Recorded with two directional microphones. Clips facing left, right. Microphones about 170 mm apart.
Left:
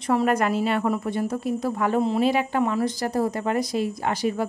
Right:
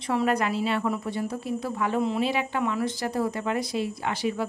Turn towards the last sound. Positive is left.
turn(degrees=45)  # may be behind; listen again after turning